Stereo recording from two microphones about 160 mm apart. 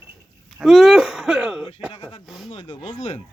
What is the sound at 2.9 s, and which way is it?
Speech, 45° left (ahead or behind).